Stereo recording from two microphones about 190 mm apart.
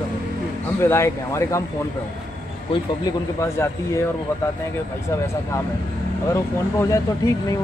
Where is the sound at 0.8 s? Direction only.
15° left (ahead or behind).